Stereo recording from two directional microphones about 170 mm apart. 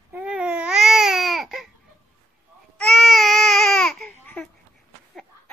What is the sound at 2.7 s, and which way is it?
Baby cry, centre (ahead or behind).